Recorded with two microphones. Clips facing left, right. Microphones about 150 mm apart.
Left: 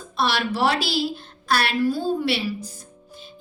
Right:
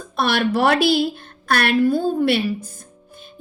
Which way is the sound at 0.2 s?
55° right (ahead or behind).